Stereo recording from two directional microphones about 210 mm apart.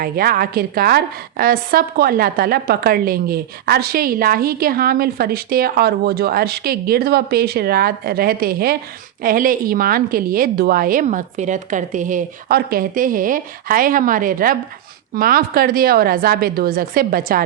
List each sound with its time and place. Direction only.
0.0 s a woman's voice: 45° right (ahead or behind)